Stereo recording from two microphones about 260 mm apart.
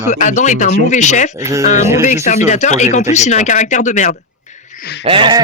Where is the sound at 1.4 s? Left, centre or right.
Centre.